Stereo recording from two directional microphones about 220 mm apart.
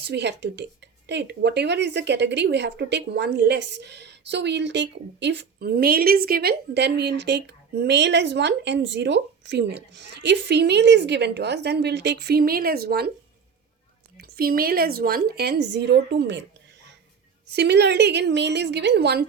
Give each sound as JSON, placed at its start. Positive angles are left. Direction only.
{"t": 0.0, "sound": "speech", "side_deg": -50}
{"t": 14.2, "sound": "speech", "side_deg": -45}
{"t": 17.5, "sound": "speech", "side_deg": -50}